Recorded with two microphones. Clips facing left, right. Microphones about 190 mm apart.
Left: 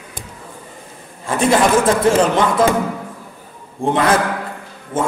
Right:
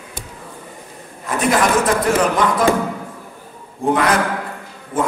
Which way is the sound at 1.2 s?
30° left (ahead or behind).